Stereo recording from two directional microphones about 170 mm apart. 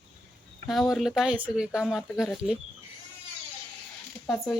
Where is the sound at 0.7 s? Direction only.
Centre (ahead or behind).